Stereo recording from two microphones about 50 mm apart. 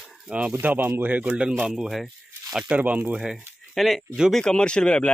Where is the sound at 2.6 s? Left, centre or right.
Right.